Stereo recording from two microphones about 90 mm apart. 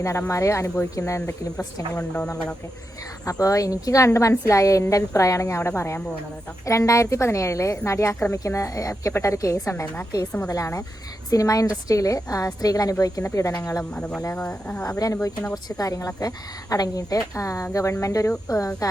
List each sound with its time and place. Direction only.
0.0 s a woman's voice: 35° left (ahead or behind)
3.2 s a woman's voice: 40° left (ahead or behind)
13.9 s speech: 15° left (ahead or behind)
14.8 s a woman's voice: 40° left (ahead or behind)